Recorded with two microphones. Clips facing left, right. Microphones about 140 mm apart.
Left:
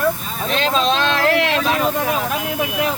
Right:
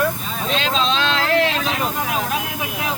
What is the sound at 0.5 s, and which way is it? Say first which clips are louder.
Speech: left 3 dB; 50° left (ahead or behind).